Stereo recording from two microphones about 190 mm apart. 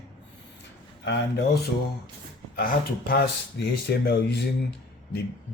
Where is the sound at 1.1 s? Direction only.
60° left (ahead or behind).